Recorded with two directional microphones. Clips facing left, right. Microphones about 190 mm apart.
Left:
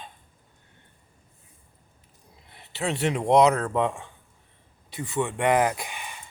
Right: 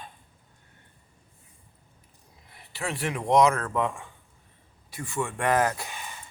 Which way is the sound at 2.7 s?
20° left (ahead or behind).